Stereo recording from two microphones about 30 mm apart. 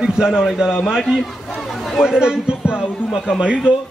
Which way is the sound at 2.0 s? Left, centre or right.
Right.